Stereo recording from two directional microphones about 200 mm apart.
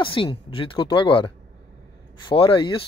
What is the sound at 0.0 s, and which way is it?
Speech, 25° left (ahead or behind).